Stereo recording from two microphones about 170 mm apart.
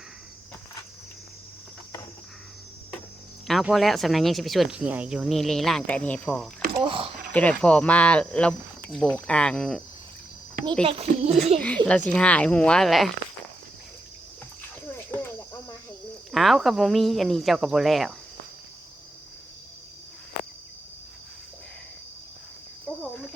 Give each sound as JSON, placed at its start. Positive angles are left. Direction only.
{"t": 3.4, "sound": "speech", "side_deg": 0}
{"t": 6.8, "sound": "speech", "side_deg": -30}
{"t": 7.3, "sound": "speech", "side_deg": 5}
{"t": 10.8, "sound": "speech", "side_deg": -35}
{"t": 11.9, "sound": "speech", "side_deg": 5}
{"t": 14.9, "sound": "a sound", "side_deg": 15}
{"t": 16.3, "sound": "speech", "side_deg": 0}